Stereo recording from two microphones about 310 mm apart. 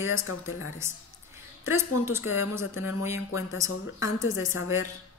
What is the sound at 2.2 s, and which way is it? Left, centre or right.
A woman's voice, left.